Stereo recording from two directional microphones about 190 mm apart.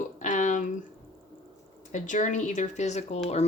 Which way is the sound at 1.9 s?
40° left (ahead or behind).